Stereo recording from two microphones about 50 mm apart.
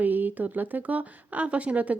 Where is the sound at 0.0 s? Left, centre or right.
Right.